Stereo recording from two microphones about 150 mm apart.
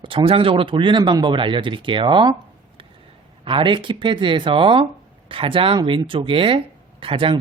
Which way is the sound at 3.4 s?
35° right (ahead or behind).